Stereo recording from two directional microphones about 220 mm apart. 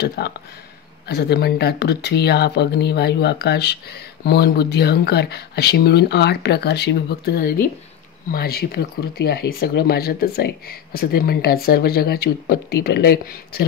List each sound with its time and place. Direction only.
0.0 s speech: 45° left (ahead or behind)